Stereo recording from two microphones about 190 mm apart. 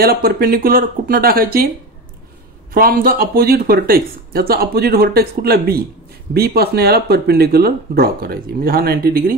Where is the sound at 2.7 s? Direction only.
50° right (ahead or behind).